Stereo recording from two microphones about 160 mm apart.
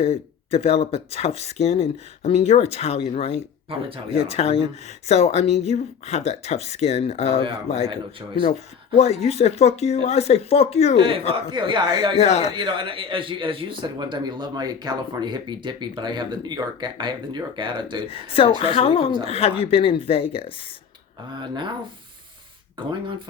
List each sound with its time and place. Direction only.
0.0 s speech: 40° left (ahead or behind)
3.7 s speech: 35° right (ahead or behind)
4.1 s speech: 40° left (ahead or behind)
9.0 s speech: 45° left (ahead or behind)
10.9 s speech: 35° right (ahead or behind)
12.1 s speech: 45° left (ahead or behind)
12.5 s speech: 30° right (ahead or behind)
18.1 s speech: 35° left (ahead or behind)
21.3 s speech: 30° right (ahead or behind)
22.9 s speech: 30° right (ahead or behind)